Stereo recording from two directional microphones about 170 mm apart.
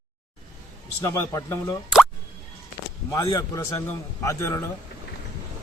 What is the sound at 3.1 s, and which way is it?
Speech, 20° left (ahead or behind).